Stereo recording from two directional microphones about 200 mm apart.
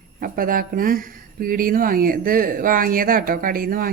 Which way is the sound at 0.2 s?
45° right (ahead or behind).